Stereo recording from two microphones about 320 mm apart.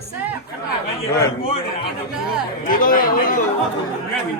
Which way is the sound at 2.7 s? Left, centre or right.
Left.